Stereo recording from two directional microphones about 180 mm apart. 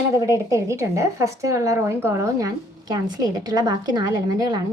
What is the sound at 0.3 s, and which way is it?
A woman's voice, 15° right (ahead or behind).